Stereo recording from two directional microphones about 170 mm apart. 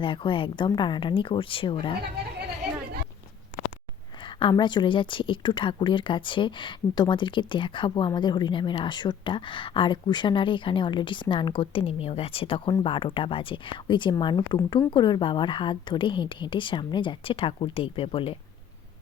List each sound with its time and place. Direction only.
0.0 s a woman's voice: 30° left (ahead or behind)
4.2 s a woman's voice: 30° left (ahead or behind)